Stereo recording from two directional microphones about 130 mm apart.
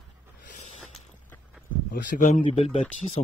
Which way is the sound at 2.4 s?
45° left (ahead or behind).